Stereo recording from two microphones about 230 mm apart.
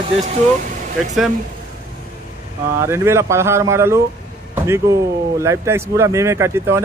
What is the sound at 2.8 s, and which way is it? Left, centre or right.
Speech, centre.